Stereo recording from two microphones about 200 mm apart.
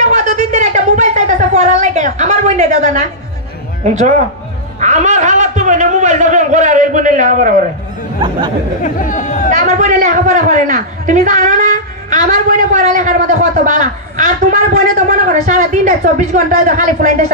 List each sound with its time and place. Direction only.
0.0 s speech: 35° right (ahead or behind)
4.7 s a man's voice: 35° right (ahead or behind)
8.2 s speech: 25° right (ahead or behind)
9.0 s speech: 40° left (ahead or behind)
9.5 s a man's voice: 40° right (ahead or behind)